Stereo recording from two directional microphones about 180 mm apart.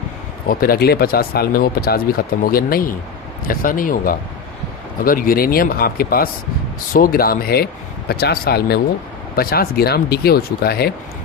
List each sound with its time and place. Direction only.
0.4 s speech: 55° left (ahead or behind)